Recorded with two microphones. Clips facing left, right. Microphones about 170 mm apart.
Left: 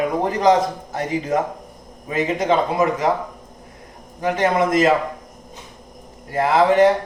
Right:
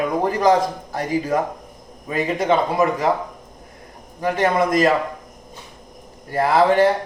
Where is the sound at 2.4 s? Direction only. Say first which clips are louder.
Right 1 dB; 20° left (ahead or behind).